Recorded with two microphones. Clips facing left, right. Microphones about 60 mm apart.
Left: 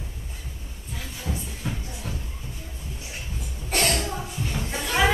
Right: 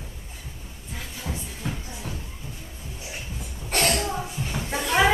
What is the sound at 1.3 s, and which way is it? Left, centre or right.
Music, centre.